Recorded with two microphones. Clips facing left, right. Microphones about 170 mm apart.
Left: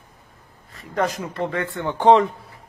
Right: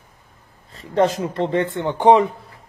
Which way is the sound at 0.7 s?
25° right (ahead or behind).